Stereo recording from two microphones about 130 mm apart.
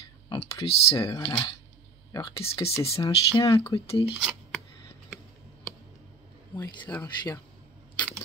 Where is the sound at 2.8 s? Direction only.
50° left (ahead or behind).